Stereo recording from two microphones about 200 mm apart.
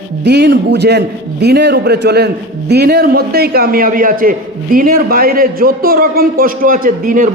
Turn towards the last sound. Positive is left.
turn(degrees=-40)  # may be behind; listen again after turning